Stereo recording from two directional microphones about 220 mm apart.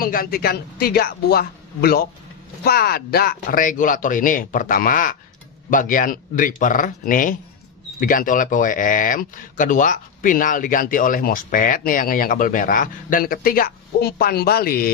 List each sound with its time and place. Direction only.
0.0 s a woman's voice: 40° left (ahead or behind)